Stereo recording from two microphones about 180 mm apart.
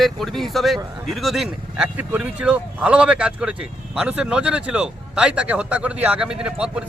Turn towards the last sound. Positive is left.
turn(degrees=-5)  # may be behind; listen again after turning